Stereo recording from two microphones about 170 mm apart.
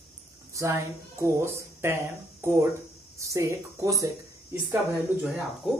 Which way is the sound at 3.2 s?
15° right (ahead or behind).